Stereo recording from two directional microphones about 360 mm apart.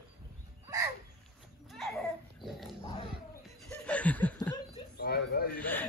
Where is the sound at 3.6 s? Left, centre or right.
Centre.